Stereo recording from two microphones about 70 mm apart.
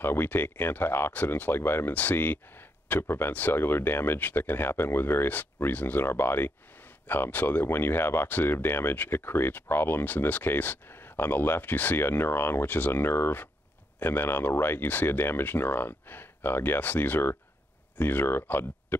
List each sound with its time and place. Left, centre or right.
0.0 s speech: left